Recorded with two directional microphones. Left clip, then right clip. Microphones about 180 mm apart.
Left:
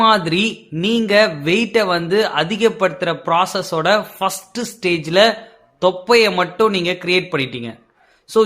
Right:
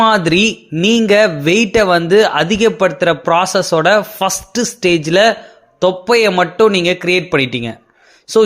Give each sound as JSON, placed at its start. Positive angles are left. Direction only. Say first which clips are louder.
{"t": 0.0, "sound": "speech", "louder": "right 3 dB", "side_deg": -35}